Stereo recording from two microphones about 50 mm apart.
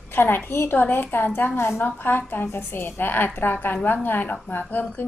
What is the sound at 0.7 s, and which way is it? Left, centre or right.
A woman's voice, left.